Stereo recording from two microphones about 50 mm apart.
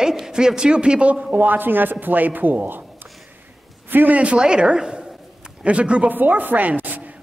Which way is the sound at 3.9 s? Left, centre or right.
Right.